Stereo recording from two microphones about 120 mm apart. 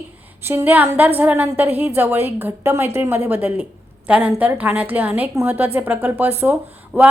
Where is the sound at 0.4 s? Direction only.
15° right (ahead or behind).